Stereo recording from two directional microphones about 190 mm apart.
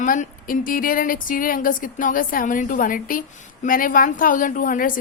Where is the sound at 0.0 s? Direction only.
45° left (ahead or behind).